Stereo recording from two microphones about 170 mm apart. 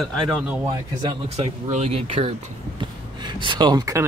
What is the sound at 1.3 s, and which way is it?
Speech, 40° right (ahead or behind).